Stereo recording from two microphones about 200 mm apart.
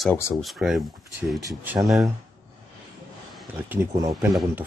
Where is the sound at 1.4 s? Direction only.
15° right (ahead or behind).